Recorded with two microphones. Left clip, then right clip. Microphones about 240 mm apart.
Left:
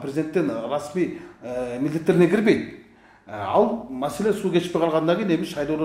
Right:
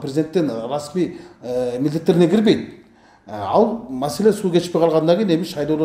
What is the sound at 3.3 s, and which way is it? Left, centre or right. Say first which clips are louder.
Speech: right 3 dB; right.